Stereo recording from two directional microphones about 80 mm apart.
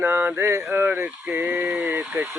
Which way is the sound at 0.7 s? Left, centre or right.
Right.